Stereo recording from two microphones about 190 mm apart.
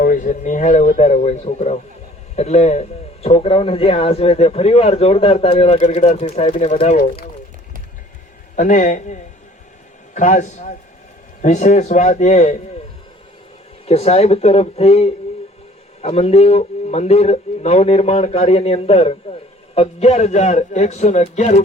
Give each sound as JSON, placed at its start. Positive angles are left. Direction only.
{"t": 0.0, "sound": "speech", "side_deg": 45}
{"t": 6.9, "sound": "speech", "side_deg": 50}
{"t": 8.5, "sound": "speech", "side_deg": 40}
{"t": 13.8, "sound": "speech", "side_deg": 30}